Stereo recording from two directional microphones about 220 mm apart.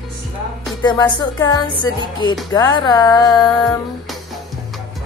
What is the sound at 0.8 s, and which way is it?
Speech, 20° left (ahead or behind).